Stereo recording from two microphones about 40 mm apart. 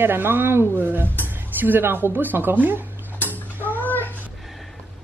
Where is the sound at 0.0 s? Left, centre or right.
Right.